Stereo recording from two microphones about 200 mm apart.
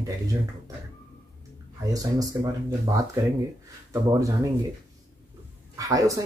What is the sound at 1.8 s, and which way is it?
Speech, 15° right (ahead or behind).